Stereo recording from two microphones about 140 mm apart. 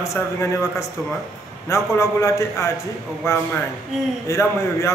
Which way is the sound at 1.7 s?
20° left (ahead or behind).